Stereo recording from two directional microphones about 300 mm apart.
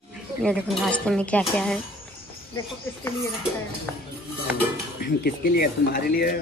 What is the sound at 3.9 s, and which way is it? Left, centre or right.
Speech, centre.